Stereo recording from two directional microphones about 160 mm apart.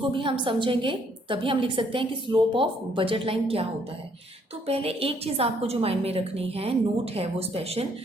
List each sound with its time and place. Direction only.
0.1 s a woman's voice: 30° right (ahead or behind)
4.6 s a woman's voice: 40° right (ahead or behind)